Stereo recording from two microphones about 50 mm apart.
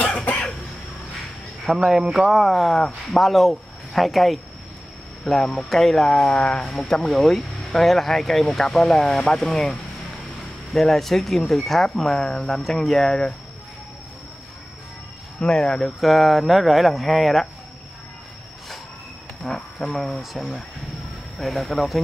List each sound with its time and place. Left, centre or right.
1.7 s speech: centre
6.7 s speech: centre
15.4 s speech: centre
16.0 s speech: centre
19.4 s insect: centre
20.2 s speech: centre